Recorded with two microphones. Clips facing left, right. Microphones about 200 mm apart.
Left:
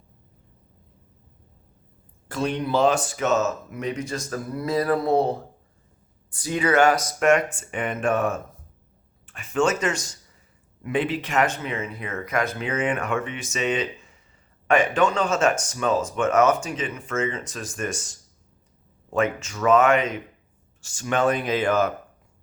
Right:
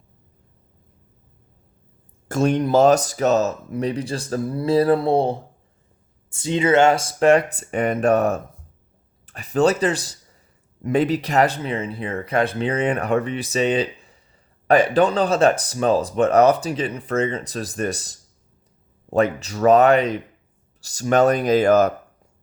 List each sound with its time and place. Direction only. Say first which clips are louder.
2.2 s speech: right 7 dB; 45° right (ahead or behind)